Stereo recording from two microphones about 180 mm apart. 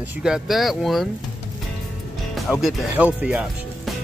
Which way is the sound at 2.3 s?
Centre (ahead or behind).